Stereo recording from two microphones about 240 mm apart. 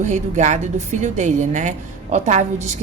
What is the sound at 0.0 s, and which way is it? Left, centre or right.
A woman's voice, right.